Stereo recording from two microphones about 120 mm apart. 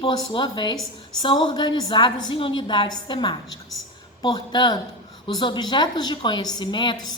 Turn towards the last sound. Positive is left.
turn(degrees=35)  # may be behind; listen again after turning